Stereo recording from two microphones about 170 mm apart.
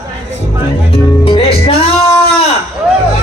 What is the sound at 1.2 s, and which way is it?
Music, 35° left (ahead or behind).